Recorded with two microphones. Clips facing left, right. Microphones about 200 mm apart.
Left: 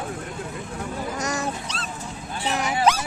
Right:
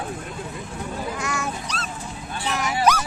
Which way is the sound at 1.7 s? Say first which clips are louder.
Right 1 dB; 25° left (ahead or behind).